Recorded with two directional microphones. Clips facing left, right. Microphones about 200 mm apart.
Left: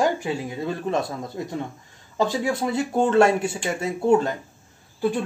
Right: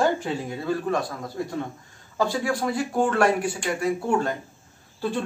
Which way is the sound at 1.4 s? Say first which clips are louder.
Right 3 dB; 20° left (ahead or behind).